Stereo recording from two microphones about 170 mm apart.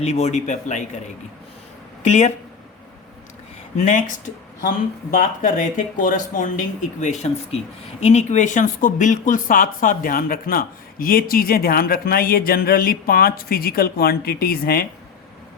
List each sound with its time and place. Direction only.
0.0 s speech: 40° left (ahead or behind)
2.0 s speech: 40° left (ahead or behind)
3.8 s speech: 50° left (ahead or behind)
5.1 s speech: 50° left (ahead or behind); by 14.8 s 65° left (ahead or behind)